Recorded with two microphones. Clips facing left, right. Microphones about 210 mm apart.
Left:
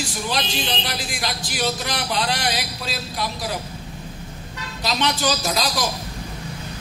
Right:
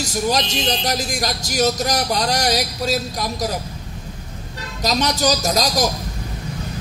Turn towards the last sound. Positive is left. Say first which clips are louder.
# right 4 dB
turn(degrees=-40)  # may be behind; listen again after turning